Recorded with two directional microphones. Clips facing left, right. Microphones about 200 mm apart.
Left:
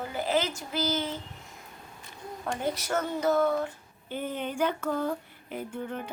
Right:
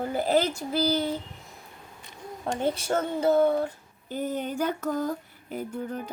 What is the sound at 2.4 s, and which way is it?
Speech, 25° right (ahead or behind).